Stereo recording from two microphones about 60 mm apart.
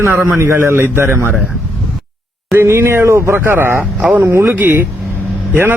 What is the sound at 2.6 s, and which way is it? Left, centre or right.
Speech, right.